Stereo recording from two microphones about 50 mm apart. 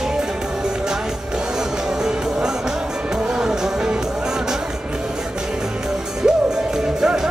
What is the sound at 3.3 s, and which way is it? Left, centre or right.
Music, centre.